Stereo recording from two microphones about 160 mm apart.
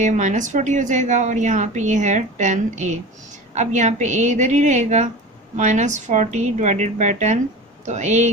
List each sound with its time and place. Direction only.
0.0 s a woman's voice: 50° right (ahead or behind)